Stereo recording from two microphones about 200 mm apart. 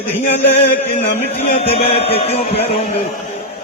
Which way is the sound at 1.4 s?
30° left (ahead or behind).